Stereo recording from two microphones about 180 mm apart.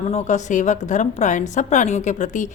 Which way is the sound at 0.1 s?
40° left (ahead or behind).